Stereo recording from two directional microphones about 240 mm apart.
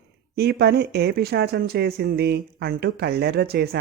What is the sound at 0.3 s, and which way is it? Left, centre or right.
Speech, right.